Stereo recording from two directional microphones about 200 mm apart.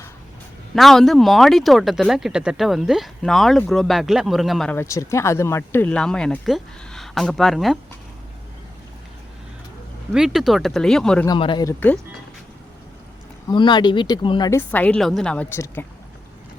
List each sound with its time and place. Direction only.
0.8 s speech: centre (ahead or behind)
10.1 s speech: centre (ahead or behind)
11.3 s speech: 25° left (ahead or behind)
13.5 s speech: 20° left (ahead or behind)
14.6 s a woman's voice: 10° left (ahead or behind)